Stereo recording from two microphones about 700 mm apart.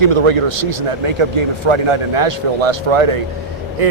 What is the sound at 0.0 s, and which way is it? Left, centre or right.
A man's voice, right.